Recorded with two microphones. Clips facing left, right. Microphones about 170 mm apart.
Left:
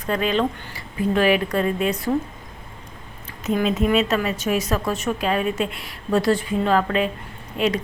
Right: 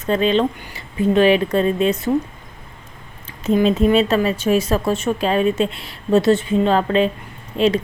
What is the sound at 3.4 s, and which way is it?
A woman's voice, 30° right (ahead or behind).